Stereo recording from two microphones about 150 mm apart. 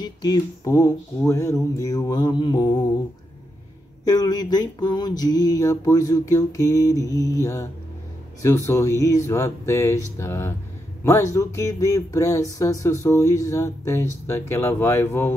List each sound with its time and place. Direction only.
0.0 s speech: 25° left (ahead or behind)
4.0 s speech: 25° left (ahead or behind)